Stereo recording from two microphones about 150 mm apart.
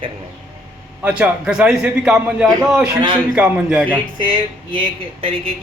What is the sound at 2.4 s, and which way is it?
Speech, 20° right (ahead or behind).